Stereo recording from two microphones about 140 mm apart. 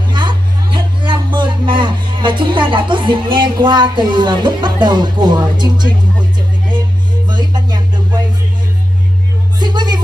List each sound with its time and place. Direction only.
0.1 s music: 35° right (ahead or behind)
7.2 s music: 30° right (ahead or behind)
9.6 s music: 30° right (ahead or behind)